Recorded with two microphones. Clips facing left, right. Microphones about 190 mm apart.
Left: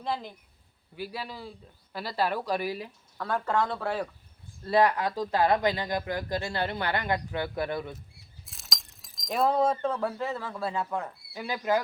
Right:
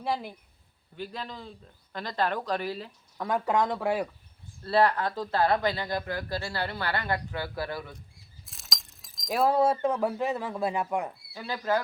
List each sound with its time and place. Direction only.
0.0 s speech: 10° right (ahead or behind)
0.9 s speech: 10° left (ahead or behind)
3.2 s speech: 15° right (ahead or behind)
4.6 s speech: 15° left (ahead or behind)
8.4 s speech: centre (ahead or behind); by 11.1 s 15° right (ahead or behind)
11.3 s speech: 15° left (ahead or behind)